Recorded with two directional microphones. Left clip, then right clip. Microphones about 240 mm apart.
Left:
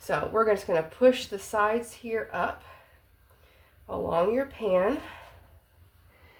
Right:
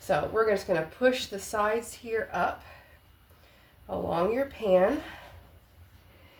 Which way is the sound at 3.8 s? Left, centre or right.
Left.